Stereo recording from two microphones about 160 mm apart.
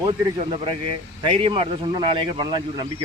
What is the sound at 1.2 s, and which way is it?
A man's voice, 35° right (ahead or behind).